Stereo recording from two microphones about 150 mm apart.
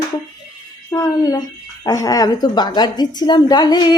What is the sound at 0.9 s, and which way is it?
A woman's voice, 20° left (ahead or behind).